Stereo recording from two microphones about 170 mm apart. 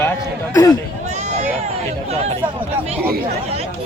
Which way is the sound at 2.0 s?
40° right (ahead or behind).